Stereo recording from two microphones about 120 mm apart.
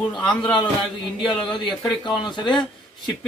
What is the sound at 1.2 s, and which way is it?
Speech, 40° left (ahead or behind).